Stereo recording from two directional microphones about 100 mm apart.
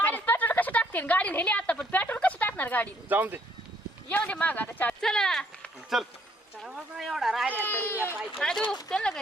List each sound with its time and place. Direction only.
0.0 s a sound: 20° left (ahead or behind)
3.1 s speech: 20° right (ahead or behind)
4.1 s speech: 15° left (ahead or behind)
4.9 s speech: 5° left (ahead or behind)
7.5 s speech: 20° left (ahead or behind)
8.4 s speech: 5° left (ahead or behind)